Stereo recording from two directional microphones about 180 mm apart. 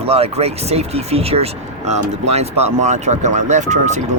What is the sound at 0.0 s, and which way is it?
Speech, 35° right (ahead or behind).